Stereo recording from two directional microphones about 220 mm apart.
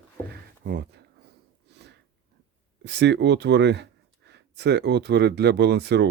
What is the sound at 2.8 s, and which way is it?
Speech, 55° right (ahead or behind).